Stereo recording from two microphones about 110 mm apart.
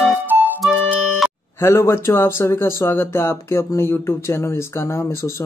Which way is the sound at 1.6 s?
25° left (ahead or behind).